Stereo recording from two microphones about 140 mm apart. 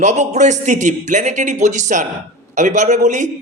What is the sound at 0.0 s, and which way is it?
Speech, 55° right (ahead or behind).